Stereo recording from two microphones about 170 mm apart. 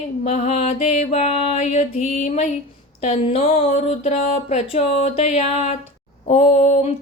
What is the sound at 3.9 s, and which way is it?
Speech, 40° left (ahead or behind).